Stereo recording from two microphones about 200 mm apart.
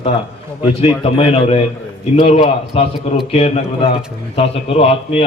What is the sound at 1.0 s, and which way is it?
A man's voice, 30° left (ahead or behind).